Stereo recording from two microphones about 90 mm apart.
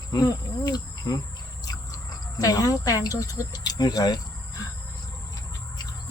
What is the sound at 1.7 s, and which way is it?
Speech, 40° left (ahead or behind).